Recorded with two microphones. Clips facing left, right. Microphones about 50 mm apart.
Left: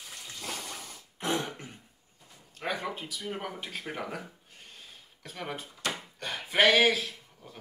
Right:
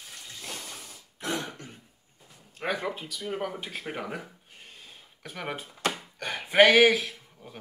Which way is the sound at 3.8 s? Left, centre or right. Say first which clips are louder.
Right 2 dB; right.